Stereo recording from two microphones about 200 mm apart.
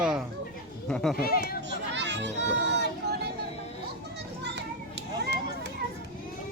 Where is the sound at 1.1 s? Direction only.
50° left (ahead or behind).